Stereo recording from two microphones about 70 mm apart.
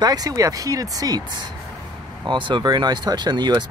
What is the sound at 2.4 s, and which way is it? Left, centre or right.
Speech, right.